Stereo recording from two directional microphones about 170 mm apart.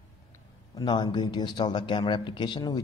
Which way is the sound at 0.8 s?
25° left (ahead or behind).